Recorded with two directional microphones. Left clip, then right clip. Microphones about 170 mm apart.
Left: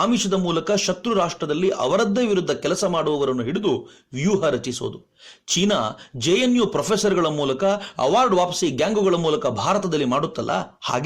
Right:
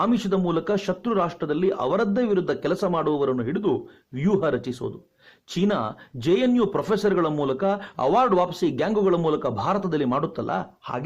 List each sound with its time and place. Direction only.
0.0 s a man's voice: 20° left (ahead or behind)